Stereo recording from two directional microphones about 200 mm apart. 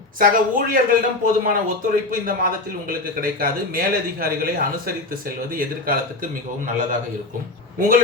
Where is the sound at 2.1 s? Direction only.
45° right (ahead or behind).